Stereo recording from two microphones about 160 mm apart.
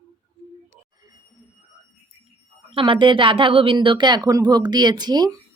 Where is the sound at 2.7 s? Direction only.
30° right (ahead or behind).